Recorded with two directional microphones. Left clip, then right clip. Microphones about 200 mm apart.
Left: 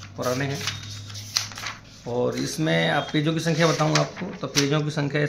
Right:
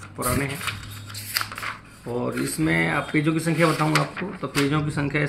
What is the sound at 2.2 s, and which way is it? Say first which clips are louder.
Speech: left 1 dB; 25° left (ahead or behind).